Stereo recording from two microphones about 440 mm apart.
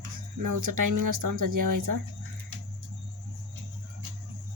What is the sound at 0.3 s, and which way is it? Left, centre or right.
Speech, right.